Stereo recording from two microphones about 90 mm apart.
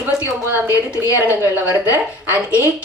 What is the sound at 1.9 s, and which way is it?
Speech, 35° left (ahead or behind).